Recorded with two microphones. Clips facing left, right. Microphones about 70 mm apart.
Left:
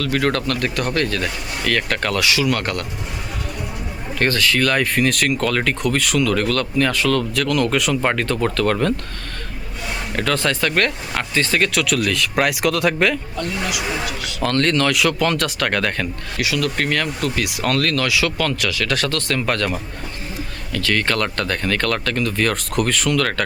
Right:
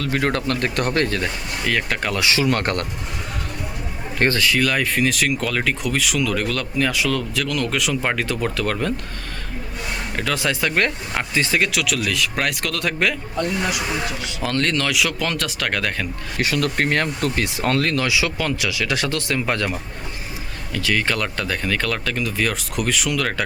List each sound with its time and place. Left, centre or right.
0.0 s speech: right
1.6 s speech: centre
2.1 s speech: right
4.2 s speech: right
4.6 s speech: centre
10.2 s speech: centre
14.4 s speech: centre
16.4 s speech: right; by 19.7 s centre
20.7 s speech: centre